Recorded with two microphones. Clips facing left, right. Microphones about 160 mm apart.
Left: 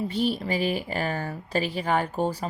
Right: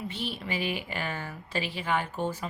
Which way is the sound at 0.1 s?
40° left (ahead or behind).